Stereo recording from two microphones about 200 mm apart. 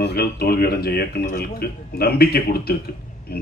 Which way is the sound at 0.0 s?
50° left (ahead or behind).